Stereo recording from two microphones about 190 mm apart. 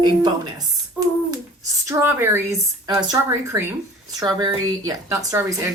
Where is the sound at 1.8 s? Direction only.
10° right (ahead or behind).